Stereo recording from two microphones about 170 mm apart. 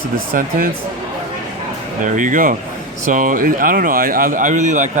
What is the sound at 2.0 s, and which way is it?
Speech, 50° right (ahead or behind).